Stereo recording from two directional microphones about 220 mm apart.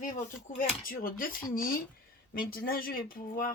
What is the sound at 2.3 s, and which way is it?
Speech, 40° left (ahead or behind).